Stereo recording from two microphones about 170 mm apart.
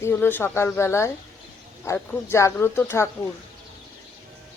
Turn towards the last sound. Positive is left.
turn(degrees=15)  # may be behind; listen again after turning